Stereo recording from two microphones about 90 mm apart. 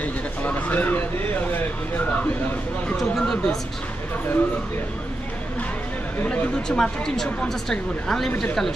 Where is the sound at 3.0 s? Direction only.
5° left (ahead or behind).